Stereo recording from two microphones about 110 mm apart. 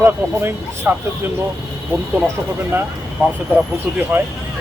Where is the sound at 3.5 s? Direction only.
15° right (ahead or behind).